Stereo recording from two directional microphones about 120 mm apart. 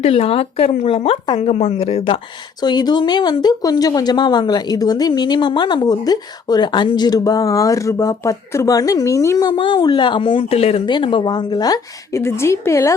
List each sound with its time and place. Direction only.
0.0 s speech: 55° left (ahead or behind)
2.6 s a woman's voice: 35° left (ahead or behind)
9.5 s speech: 45° left (ahead or behind)
10.6 s speech: 55° left (ahead or behind)
10.8 s a woman's voice: 40° left (ahead or behind); by 12.9 s 25° left (ahead or behind)